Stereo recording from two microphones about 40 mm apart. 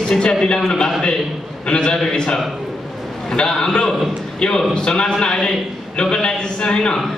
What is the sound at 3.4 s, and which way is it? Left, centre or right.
A man's voice, centre.